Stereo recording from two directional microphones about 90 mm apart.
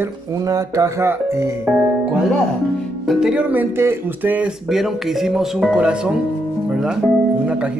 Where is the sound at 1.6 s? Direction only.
15° right (ahead or behind).